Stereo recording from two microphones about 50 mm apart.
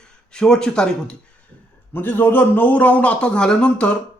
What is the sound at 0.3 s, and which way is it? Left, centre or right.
Speech, centre.